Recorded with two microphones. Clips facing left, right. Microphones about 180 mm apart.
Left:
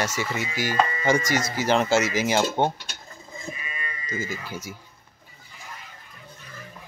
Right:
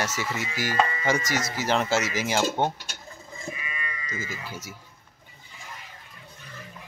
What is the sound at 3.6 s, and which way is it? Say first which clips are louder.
Sheep: left 1 dB; 30° left (ahead or behind).